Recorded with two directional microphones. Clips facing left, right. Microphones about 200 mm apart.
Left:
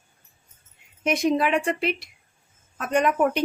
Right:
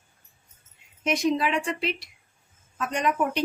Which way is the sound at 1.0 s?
55° left (ahead or behind).